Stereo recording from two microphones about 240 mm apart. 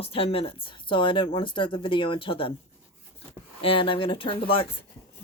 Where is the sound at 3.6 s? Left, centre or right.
Left.